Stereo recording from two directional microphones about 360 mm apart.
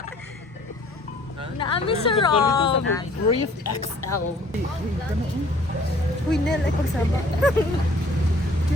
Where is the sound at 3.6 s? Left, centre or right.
Left.